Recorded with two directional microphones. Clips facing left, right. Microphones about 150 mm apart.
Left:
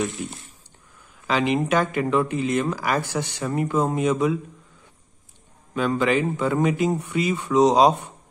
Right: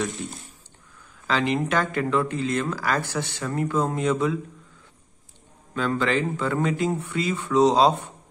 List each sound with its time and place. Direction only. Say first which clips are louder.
1.2 s speech: left 2 dB; 15° left (ahead or behind)
5.8 s speech: left 3 dB; 15° left (ahead or behind)